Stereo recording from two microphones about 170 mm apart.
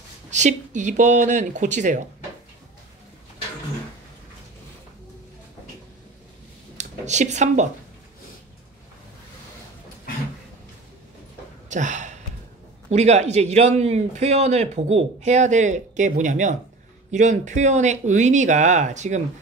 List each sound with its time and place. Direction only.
0.3 s speech: 45° right (ahead or behind)
6.8 s speech: 45° right (ahead or behind)
11.7 s a sound: 45° right (ahead or behind)
12.9 s a man's voice: 40° right (ahead or behind)